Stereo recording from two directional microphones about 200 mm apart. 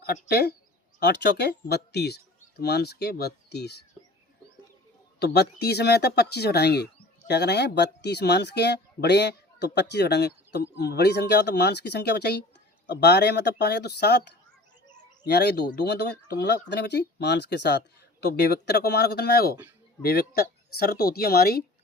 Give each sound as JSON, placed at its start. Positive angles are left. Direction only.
{"t": 0.0, "sound": "speech", "side_deg": 50}
{"t": 5.2, "sound": "speech", "side_deg": 55}